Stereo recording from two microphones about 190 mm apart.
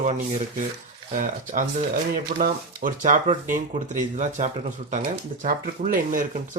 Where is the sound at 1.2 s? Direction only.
45° right (ahead or behind).